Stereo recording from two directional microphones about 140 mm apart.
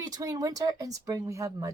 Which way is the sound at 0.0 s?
25° right (ahead or behind).